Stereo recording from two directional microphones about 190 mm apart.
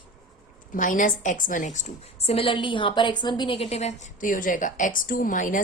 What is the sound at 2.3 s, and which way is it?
A woman's voice, 30° left (ahead or behind).